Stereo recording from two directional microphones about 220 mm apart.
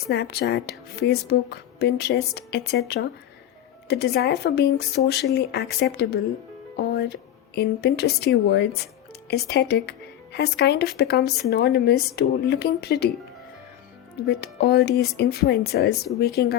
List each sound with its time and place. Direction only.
0.1 s a woman's voice: 50° left (ahead or behind)
6.7 s a woman's voice: 45° left (ahead or behind)
14.3 s a woman's voice: 50° left (ahead or behind)